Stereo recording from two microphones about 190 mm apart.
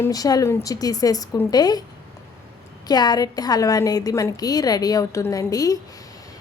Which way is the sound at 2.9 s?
20° left (ahead or behind).